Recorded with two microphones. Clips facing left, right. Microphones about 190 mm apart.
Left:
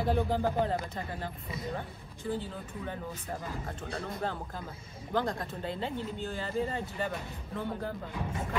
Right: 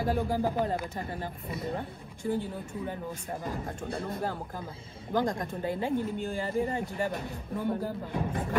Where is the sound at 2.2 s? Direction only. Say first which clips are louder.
Right 4 dB; 15° right (ahead or behind).